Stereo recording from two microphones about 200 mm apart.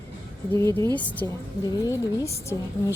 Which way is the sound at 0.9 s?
5° left (ahead or behind).